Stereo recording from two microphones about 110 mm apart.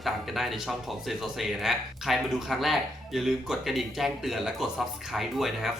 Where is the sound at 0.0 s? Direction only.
Centre (ahead or behind).